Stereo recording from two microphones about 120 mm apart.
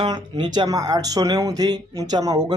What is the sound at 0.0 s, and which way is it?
Speech, 40° right (ahead or behind).